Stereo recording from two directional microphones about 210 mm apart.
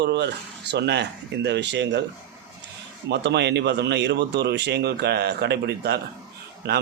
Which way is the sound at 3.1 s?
55° right (ahead or behind).